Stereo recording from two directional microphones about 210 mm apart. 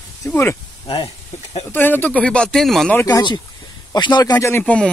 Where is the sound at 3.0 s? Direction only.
20° left (ahead or behind).